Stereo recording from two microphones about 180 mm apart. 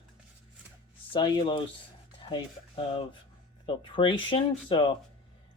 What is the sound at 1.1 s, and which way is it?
Speech, 25° left (ahead or behind).